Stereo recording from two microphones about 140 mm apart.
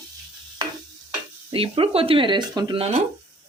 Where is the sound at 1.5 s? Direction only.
40° right (ahead or behind).